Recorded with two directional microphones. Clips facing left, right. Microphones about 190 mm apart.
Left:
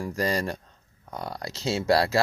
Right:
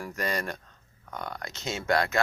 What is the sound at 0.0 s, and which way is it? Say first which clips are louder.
Speech: left 5 dB; 30° left (ahead or behind).